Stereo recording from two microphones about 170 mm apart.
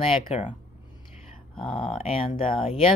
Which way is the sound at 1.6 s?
30° left (ahead or behind).